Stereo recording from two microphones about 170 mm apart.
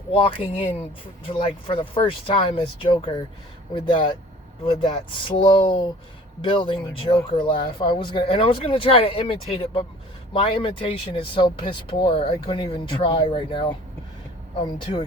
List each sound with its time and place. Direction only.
0.1 s speech: 30° left (ahead or behind)